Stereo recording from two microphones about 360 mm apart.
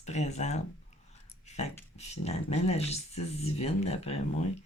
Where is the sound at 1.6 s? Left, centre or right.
Centre.